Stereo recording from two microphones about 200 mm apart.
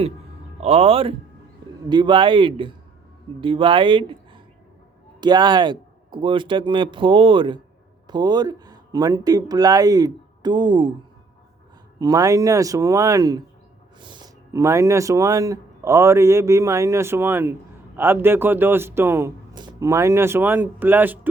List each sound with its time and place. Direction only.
0.6 s speech: 30° right (ahead or behind)
5.2 s speech: 20° right (ahead or behind)
11.9 s speech: 15° right (ahead or behind)